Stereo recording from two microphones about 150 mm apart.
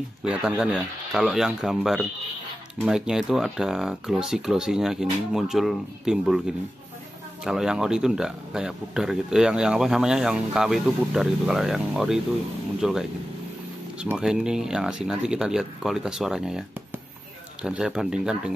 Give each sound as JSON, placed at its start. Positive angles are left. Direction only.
{"t": 0.2, "sound": "speech", "side_deg": -5}
{"t": 7.4, "sound": "speech", "side_deg": -5}
{"t": 14.0, "sound": "speech", "side_deg": -5}
{"t": 17.6, "sound": "speech", "side_deg": -5}